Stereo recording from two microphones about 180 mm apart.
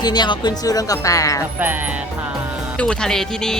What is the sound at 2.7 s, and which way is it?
Speech, 5° left (ahead or behind).